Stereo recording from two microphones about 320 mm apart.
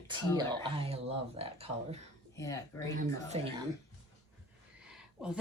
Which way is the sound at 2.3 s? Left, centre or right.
Centre.